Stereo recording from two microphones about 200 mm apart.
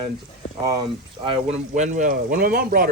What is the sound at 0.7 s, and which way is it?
Speech, 20° right (ahead or behind).